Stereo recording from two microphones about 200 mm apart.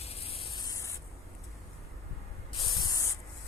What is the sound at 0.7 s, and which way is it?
Spray, 15° left (ahead or behind).